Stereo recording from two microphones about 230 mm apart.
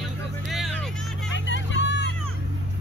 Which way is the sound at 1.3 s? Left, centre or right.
Left.